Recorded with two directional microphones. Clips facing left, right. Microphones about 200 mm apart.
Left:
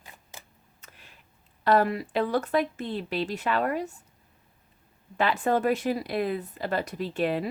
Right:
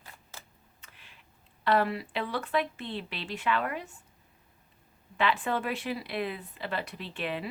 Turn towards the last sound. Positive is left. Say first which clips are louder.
# left 8 dB
turn(degrees=40)  # may be behind; listen again after turning